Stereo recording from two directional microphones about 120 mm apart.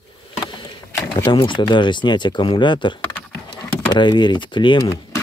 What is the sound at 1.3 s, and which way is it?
Speech, 40° left (ahead or behind).